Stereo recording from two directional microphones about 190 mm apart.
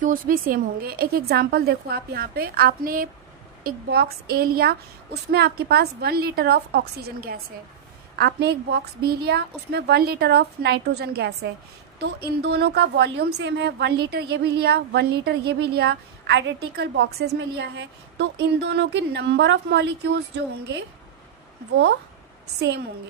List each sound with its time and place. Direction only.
0.0 s a woman's voice: 45° right (ahead or behind); by 20.2 s 65° right (ahead or behind)